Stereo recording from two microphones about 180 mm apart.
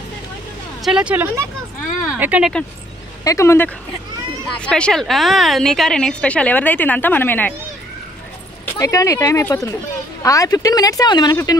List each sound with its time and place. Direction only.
0.8 s speech: 5° right (ahead or behind)
3.3 s a woman's voice: 15° left (ahead or behind)
8.6 s speech: 20° left (ahead or behind)